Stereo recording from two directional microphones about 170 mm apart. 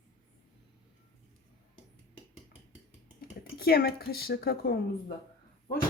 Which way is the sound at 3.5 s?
65° left (ahead or behind).